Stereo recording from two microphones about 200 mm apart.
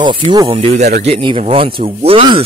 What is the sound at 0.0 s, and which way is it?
Speech, 25° right (ahead or behind).